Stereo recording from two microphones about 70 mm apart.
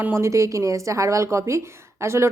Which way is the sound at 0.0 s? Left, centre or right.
Right.